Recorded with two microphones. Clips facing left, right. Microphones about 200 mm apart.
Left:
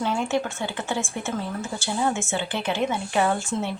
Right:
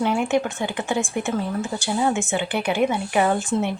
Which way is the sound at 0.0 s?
15° right (ahead or behind).